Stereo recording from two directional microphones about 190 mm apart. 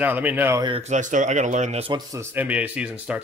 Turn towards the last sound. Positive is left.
turn(degrees=-5)  # may be behind; listen again after turning